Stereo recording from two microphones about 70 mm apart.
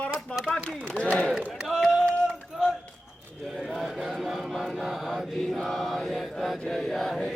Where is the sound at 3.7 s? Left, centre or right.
Centre.